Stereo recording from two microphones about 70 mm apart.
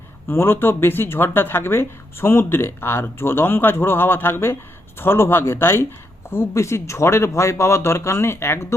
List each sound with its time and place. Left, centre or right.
0.3 s speech: left